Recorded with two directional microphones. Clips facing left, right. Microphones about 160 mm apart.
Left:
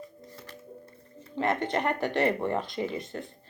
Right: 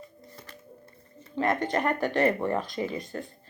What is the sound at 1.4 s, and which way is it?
Speech, 25° left (ahead or behind).